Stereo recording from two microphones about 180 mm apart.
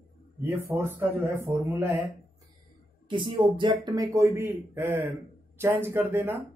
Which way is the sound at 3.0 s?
25° right (ahead or behind).